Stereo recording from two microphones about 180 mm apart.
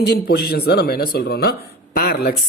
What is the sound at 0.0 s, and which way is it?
A woman's voice, 65° left (ahead or behind).